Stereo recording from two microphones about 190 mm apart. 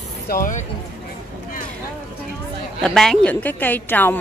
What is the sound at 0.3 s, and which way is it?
Speech, 45° left (ahead or behind).